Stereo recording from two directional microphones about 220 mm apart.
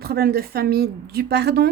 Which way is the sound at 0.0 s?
45° right (ahead or behind).